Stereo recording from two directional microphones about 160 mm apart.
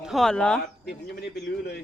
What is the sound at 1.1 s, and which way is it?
Speech, 90° left.